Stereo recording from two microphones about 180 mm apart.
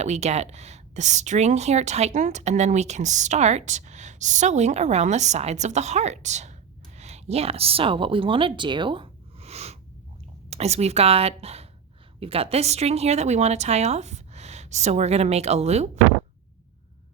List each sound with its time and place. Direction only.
0.0 s speech: 40° right (ahead or behind)